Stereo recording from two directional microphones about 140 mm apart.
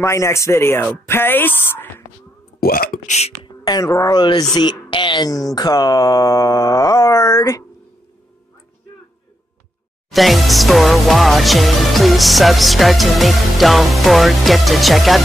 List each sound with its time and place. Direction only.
0.0 s mantra: 20° left (ahead or behind)
1.0 s a woman's voice: 15° left (ahead or behind)
2.6 s speech: 90° left
3.1 s speech: 50° left (ahead or behind)
3.4 s mantra: 30° left (ahead or behind)
10.1 s music: centre (ahead or behind)